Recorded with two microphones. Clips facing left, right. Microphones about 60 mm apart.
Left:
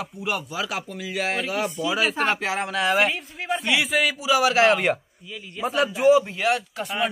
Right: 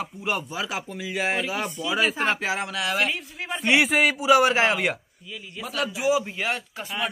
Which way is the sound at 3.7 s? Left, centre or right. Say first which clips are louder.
Right 5 dB; right.